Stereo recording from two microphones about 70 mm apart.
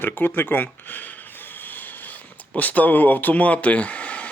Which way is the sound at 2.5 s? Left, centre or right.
Left.